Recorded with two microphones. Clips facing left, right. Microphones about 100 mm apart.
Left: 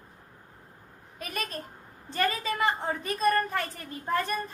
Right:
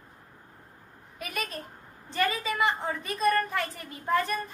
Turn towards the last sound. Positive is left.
turn(degrees=40)  # may be behind; listen again after turning